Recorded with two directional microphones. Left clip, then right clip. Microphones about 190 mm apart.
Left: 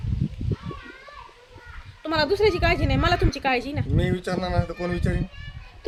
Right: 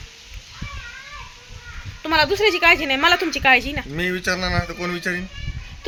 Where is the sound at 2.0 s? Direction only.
Centre (ahead or behind).